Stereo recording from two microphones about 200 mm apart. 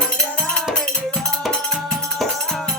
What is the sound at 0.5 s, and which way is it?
Music, 5° left (ahead or behind).